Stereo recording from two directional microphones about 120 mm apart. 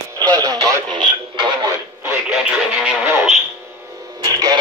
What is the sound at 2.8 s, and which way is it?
Music, 15° right (ahead or behind).